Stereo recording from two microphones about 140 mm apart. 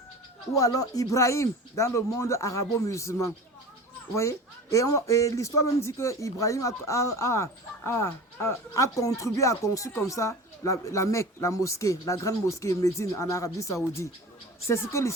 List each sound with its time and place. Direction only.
0.5 s a man's voice: 25° left (ahead or behind)